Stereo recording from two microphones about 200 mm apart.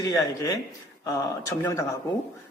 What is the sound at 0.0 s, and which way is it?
Speech, 15° left (ahead or behind).